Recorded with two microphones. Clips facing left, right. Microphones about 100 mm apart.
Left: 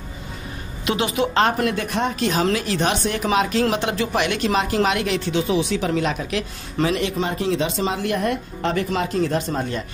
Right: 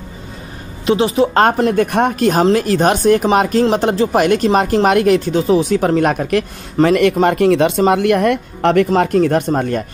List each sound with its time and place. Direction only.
0.8 s a woman's voice: 30° right (ahead or behind)
1.7 s speech: 50° right (ahead or behind)